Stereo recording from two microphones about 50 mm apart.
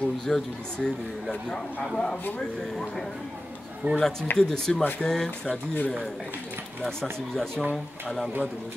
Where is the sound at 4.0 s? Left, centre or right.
Centre.